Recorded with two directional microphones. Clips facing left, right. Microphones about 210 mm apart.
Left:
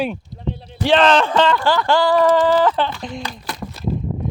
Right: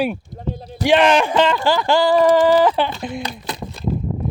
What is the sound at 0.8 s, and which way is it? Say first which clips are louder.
Speech: even; 15° right (ahead or behind).